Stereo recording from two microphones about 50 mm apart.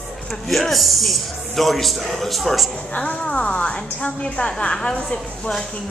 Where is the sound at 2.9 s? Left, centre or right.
Left.